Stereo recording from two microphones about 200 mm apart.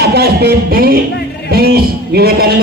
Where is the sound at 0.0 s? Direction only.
50° right (ahead or behind).